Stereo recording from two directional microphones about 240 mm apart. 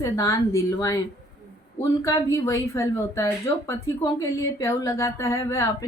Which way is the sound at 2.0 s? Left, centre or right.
Centre.